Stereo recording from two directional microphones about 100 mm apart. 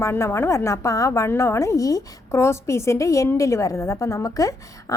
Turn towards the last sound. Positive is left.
turn(degrees=35)  # may be behind; listen again after turning